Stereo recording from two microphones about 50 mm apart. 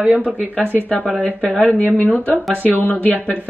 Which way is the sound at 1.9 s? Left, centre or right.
Left.